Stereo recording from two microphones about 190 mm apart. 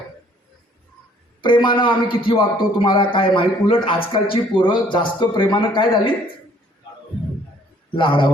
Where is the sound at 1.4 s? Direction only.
25° left (ahead or behind).